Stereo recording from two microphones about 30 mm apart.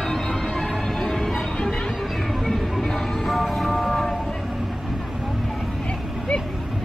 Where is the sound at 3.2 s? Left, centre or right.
Centre.